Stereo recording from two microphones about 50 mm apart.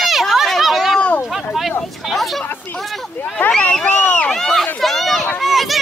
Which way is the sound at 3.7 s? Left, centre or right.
Centre.